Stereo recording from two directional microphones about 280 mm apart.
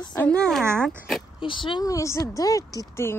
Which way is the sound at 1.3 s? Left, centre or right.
Centre.